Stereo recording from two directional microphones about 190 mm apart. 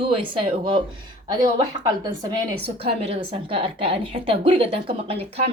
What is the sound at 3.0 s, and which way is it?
A woman's voice, 30° right (ahead or behind).